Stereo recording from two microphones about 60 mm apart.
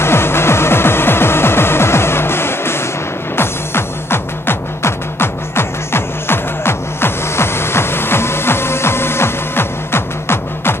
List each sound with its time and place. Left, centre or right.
0.0 s music: left